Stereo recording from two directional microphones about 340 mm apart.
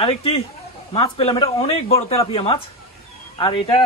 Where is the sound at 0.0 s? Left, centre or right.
Centre.